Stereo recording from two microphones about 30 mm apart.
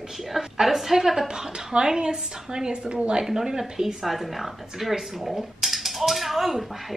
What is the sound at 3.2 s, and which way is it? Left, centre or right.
Speech, centre.